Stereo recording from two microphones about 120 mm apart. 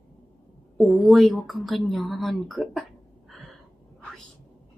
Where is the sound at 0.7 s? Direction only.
Centre (ahead or behind).